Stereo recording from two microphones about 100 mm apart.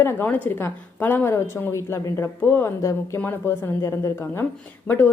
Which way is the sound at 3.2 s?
20° left (ahead or behind).